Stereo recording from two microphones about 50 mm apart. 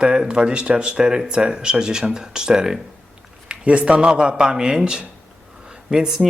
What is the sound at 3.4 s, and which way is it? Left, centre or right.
A man's voice, right.